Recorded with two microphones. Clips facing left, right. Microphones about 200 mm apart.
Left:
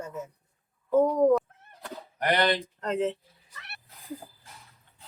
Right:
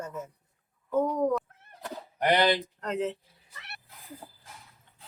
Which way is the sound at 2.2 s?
25° right (ahead or behind).